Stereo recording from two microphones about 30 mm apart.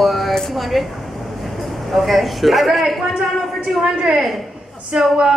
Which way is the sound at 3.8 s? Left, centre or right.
Right.